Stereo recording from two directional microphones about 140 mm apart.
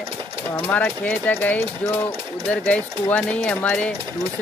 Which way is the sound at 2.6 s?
10° left (ahead or behind).